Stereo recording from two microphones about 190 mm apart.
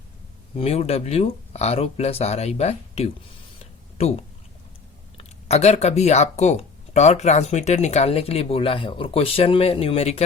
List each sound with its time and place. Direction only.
0.5 s speech: 30° left (ahead or behind)
3.6 s a sound: 35° left (ahead or behind)
5.1 s speech: 35° left (ahead or behind)